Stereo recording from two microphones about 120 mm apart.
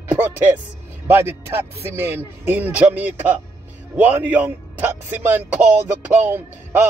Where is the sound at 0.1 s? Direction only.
15° right (ahead or behind).